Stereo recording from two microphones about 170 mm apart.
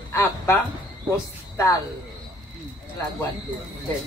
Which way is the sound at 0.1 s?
15° left (ahead or behind).